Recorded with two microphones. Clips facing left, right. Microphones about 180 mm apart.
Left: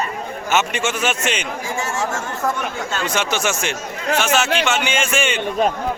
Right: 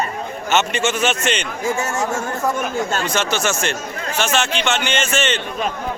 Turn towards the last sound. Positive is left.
turn(degrees=10)  # may be behind; listen again after turning